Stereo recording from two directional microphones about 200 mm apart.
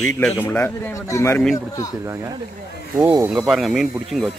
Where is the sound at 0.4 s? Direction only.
10° left (ahead or behind).